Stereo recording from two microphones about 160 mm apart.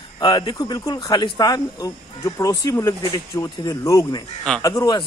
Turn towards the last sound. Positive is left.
turn(degrees=25)  # may be behind; listen again after turning